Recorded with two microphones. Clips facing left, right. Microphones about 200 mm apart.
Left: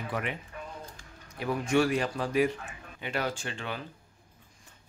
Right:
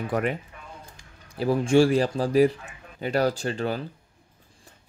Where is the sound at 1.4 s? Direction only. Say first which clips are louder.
Right 7 dB; 30° right (ahead or behind).